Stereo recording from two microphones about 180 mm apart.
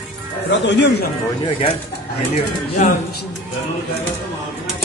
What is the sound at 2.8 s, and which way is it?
Speech, 40° left (ahead or behind).